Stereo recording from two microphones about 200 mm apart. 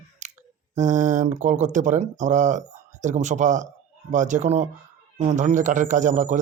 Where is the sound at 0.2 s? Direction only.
35° right (ahead or behind).